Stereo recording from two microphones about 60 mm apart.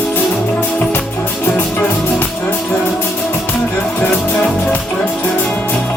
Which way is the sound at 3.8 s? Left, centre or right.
Left.